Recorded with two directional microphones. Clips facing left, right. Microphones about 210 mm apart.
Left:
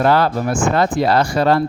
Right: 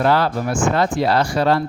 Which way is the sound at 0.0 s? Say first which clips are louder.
Left 2 dB; 50° left (ahead or behind).